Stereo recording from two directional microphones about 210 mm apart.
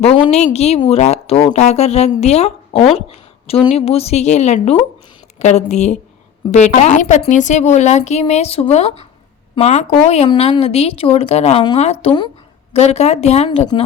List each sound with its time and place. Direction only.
0.0 s speech: 30° left (ahead or behind)